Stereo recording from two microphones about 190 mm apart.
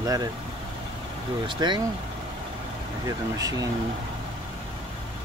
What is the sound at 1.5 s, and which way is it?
Speech, 25° right (ahead or behind).